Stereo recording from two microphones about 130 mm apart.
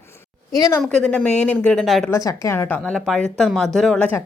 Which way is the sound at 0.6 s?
20° left (ahead or behind).